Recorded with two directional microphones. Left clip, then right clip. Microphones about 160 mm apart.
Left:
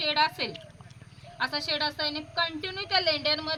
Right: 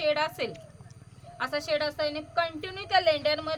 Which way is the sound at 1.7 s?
45° right (ahead or behind).